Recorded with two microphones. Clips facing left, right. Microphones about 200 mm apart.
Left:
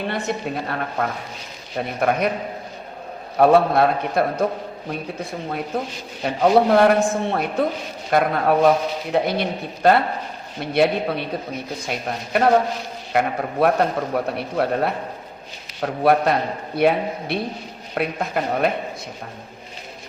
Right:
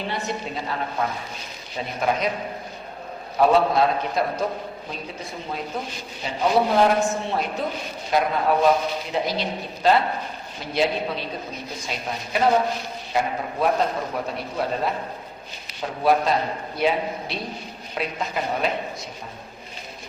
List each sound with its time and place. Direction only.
0.1 s a man's voice: 55° left (ahead or behind)
3.3 s a man's voice: 55° left (ahead or behind)
6.2 s a man's voice: 60° left (ahead or behind)